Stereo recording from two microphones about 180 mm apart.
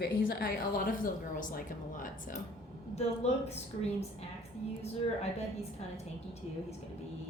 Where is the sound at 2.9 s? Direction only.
35° left (ahead or behind).